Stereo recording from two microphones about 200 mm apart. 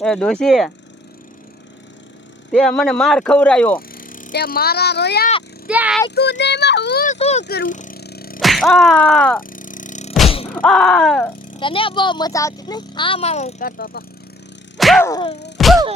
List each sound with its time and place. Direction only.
0.0 s speech: 5° left (ahead or behind)
2.5 s speech: 5° left (ahead or behind)
3.8 s speech: 45° left (ahead or behind)
5.6 s a child's voice: 5° right (ahead or behind)
6.1 s speech: 60° left (ahead or behind)
7.1 s speech: 35° left (ahead or behind)
7.4 s a sound: 50° left (ahead or behind)
8.4 s music: centre (ahead or behind)
9.4 s music: 40° left (ahead or behind)
10.5 s speech: 5° left (ahead or behind)
11.4 s speech: 25° left (ahead or behind); by 14.0 s 45° left (ahead or behind)
14.8 s music: centre (ahead or behind)
15.0 s music: 15° left (ahead or behind)
15.5 s music: centre (ahead or behind)